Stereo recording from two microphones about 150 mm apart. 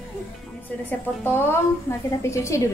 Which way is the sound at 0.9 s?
15° left (ahead or behind).